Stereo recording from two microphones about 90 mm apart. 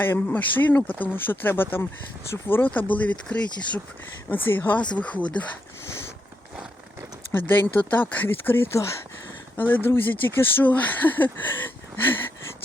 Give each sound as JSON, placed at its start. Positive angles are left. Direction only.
{"t": 0.0, "sound": "speech", "side_deg": 20}
{"t": 7.3, "sound": "speech", "side_deg": 20}